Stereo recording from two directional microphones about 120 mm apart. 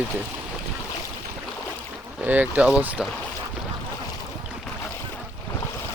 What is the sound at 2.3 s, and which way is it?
Speech, 15° right (ahead or behind).